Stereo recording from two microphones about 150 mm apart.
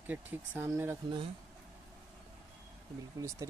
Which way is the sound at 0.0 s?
10° right (ahead or behind).